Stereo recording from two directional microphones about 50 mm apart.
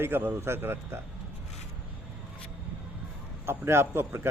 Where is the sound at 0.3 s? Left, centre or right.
Right.